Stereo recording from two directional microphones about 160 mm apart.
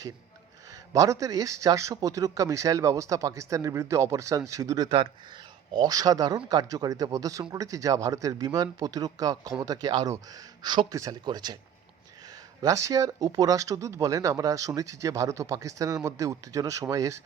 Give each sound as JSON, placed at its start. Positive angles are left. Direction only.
{"t": 0.9, "sound": "speech", "side_deg": -20}
{"t": 12.6, "sound": "speech", "side_deg": -20}